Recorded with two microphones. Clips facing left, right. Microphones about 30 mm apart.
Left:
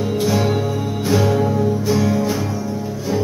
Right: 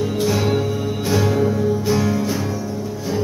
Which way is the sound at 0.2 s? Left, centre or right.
Centre.